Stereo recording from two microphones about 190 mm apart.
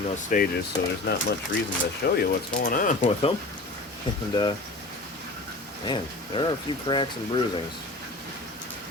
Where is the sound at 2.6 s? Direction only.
45° left (ahead or behind).